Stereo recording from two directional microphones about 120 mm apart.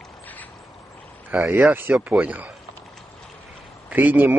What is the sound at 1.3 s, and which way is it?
Speech, 20° right (ahead or behind).